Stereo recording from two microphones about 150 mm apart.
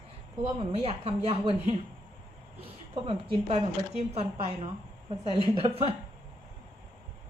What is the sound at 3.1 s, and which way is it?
A woman's voice, 40° right (ahead or behind).